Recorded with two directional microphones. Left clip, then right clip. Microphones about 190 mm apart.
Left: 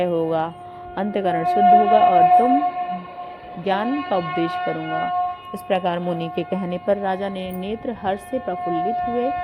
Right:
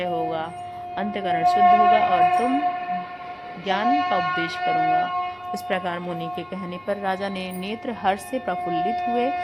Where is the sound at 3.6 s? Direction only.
10° left (ahead or behind).